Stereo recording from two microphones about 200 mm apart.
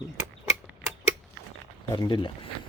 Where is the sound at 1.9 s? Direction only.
25° left (ahead or behind).